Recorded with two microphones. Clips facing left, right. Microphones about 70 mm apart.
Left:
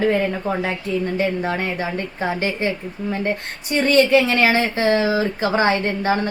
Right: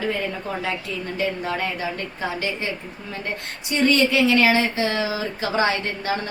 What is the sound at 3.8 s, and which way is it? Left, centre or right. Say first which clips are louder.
A woman's voice: left 3 dB; left.